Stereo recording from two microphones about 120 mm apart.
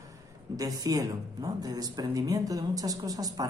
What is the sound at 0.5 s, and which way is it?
Speech, 30° right (ahead or behind).